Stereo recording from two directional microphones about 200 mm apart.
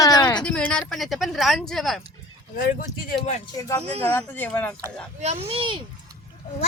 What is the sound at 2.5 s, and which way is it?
Speech, 45° left (ahead or behind).